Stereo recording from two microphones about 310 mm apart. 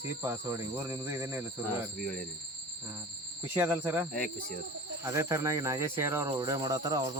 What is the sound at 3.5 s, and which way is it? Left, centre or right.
Speech, centre.